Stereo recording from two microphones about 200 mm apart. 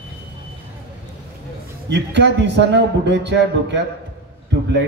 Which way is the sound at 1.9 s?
60° right (ahead or behind).